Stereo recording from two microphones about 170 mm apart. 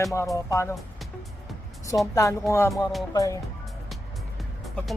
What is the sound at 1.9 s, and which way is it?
Speech, 20° left (ahead or behind).